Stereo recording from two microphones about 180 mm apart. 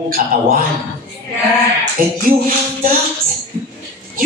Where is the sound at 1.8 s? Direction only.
50° right (ahead or behind).